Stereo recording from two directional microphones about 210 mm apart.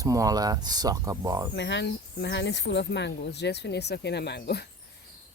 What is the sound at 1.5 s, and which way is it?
Speech, 55° left (ahead or behind).